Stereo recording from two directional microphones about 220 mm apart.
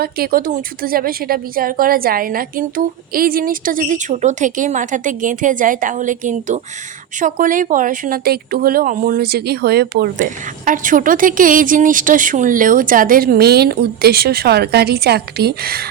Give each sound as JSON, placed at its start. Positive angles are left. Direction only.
{"t": 0.0, "sound": "a woman's voice", "side_deg": -40}